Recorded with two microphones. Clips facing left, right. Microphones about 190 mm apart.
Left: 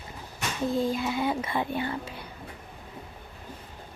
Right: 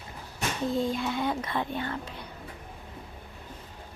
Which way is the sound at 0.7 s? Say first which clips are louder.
Left 2 dB; 5° left (ahead or behind).